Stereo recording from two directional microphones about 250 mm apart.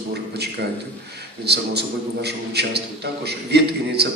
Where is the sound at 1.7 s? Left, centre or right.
Right.